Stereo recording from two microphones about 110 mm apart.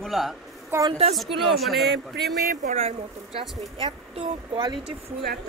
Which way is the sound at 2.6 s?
85° right.